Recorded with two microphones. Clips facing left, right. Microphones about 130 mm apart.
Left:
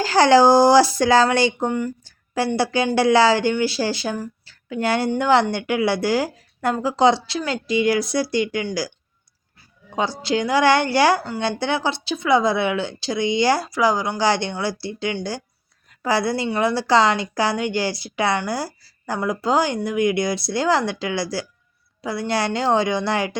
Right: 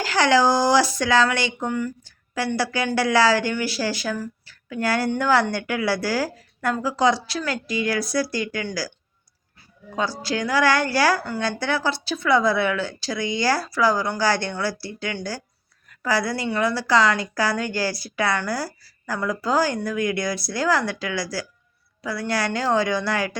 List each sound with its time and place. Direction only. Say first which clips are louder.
0.0 s speech: left 5 dB; 35° left (ahead or behind)
9.9 s speech: left 3 dB; 25° left (ahead or behind)